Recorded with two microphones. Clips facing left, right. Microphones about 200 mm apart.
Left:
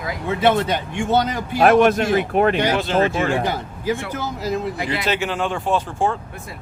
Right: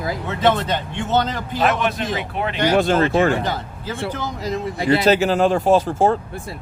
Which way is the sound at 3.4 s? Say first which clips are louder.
Left 2 dB; 10° left (ahead or behind).